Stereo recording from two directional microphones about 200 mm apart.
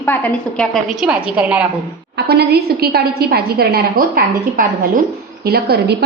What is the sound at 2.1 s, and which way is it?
A woman's voice, 55° right (ahead or behind).